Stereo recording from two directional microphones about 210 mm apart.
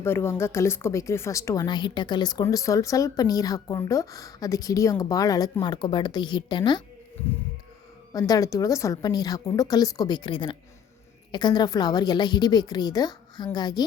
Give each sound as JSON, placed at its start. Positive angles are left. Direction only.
{"t": 0.0, "sound": "a woman's voice", "side_deg": 10}
{"t": 8.1, "sound": "a woman's voice", "side_deg": 15}